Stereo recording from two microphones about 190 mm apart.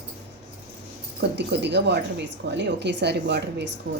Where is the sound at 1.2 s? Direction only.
65° right (ahead or behind).